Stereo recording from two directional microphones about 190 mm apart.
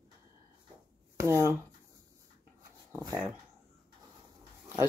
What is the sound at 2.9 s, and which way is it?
Speech, 15° right (ahead or behind).